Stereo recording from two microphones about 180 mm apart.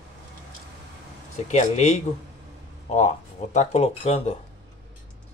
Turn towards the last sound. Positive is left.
turn(degrees=35)  # may be behind; listen again after turning